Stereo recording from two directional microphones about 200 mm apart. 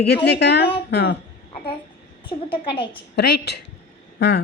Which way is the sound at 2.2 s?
25° left (ahead or behind).